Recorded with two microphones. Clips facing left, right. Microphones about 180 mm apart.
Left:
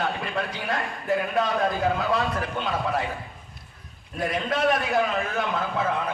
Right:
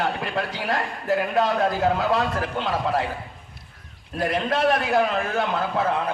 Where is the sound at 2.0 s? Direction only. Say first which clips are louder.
Right 2 dB; 30° right (ahead or behind).